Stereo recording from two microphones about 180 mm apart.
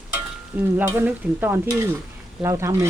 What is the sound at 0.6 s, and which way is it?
Speech, 10° right (ahead or behind).